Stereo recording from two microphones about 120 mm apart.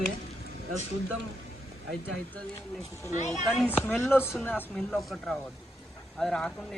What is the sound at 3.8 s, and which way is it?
Speech, 20° left (ahead or behind).